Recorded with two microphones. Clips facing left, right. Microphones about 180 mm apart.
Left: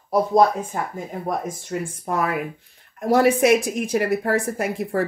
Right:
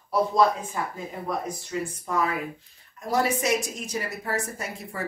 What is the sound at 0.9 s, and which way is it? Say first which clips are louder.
A woman's voice: left 4 dB; 50° left (ahead or behind).